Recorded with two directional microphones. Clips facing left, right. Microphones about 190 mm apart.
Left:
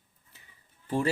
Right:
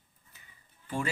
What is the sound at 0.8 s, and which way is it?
Speech, 35° left (ahead or behind).